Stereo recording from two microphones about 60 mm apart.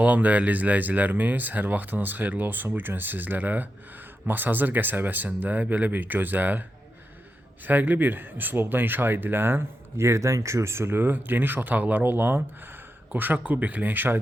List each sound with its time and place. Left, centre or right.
0.0 s speech: right